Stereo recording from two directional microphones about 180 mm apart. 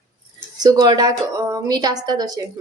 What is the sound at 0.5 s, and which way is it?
A woman's voice, 20° right (ahead or behind).